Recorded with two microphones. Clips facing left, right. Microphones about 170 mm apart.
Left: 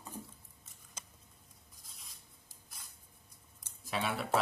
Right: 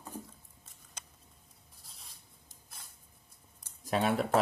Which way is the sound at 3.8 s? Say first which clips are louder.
Right 7 dB; 45° right (ahead or behind).